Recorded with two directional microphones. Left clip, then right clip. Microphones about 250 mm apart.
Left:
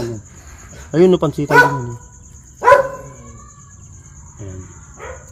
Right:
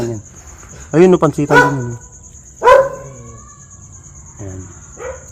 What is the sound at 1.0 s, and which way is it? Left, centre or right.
Speech, centre.